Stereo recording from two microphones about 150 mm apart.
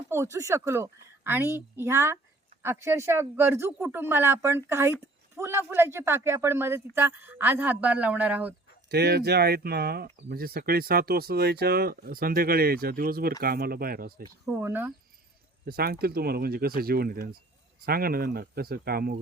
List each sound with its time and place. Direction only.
0.1 s speech: 20° right (ahead or behind)
8.9 s speech: 90° right
14.6 s speech: 15° right (ahead or behind)
15.6 s speech: 90° right